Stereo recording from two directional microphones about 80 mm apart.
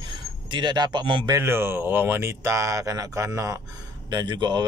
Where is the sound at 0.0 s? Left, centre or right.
Right.